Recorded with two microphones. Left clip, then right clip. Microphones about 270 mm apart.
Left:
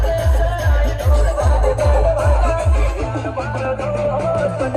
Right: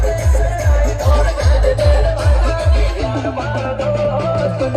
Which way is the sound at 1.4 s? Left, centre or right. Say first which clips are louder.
Right 1 dB; centre.